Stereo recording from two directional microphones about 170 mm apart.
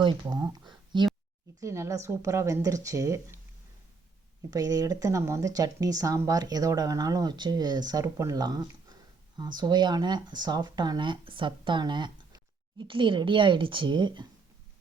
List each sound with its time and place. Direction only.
0.0 s speech: 25° right (ahead or behind)
4.5 s speech: 20° right (ahead or behind)